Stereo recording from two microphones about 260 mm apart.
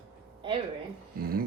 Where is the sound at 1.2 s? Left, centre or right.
Right.